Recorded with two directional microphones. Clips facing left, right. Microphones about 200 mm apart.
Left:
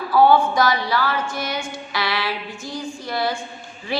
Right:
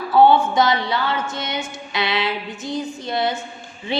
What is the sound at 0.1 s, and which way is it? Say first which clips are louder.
A woman's voice: right 1 dB; 25° right (ahead or behind).